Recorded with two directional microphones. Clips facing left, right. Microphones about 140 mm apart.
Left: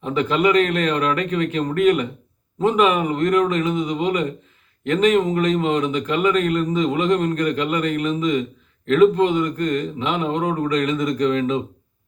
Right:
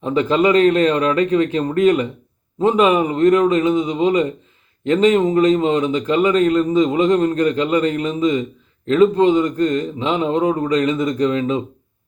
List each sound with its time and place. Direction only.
0.0 s a man's voice: 35° right (ahead or behind)